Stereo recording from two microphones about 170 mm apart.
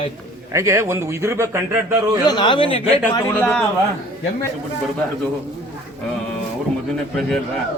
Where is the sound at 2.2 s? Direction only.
25° left (ahead or behind).